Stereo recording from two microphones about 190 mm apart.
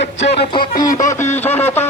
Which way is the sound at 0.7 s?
45° left (ahead or behind).